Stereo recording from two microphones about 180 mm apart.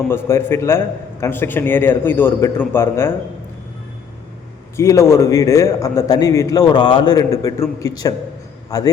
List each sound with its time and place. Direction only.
0.1 s a man's voice: 15° left (ahead or behind)
4.8 s a man's voice: 15° left (ahead or behind)